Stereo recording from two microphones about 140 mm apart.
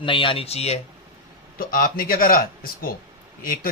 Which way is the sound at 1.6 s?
85° left.